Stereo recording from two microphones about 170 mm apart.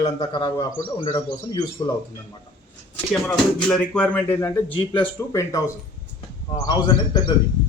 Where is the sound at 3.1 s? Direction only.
Centre (ahead or behind); by 5.6 s 20° left (ahead or behind).